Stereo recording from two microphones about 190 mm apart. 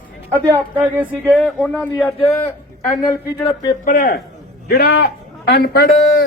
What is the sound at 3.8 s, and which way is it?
Speech, 45° left (ahead or behind).